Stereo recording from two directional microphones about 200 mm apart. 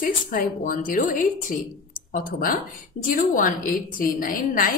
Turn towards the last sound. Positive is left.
turn(degrees=45)  # may be behind; listen again after turning